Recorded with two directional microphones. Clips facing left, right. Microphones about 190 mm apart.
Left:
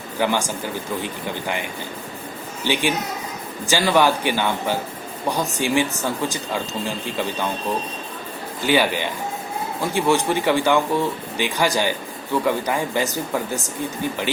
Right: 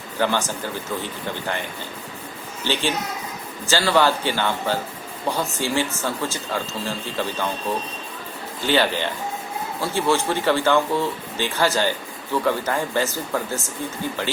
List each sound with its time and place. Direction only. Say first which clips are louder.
0.2 s speech: left 1 dB; 15° left (ahead or behind)
2.6 s speech: left 2 dB; 15° left (ahead or behind)
8.6 s speech: left 1 dB; 10° left (ahead or behind)